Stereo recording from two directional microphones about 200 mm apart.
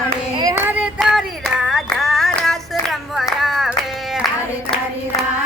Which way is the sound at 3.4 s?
Centre (ahead or behind).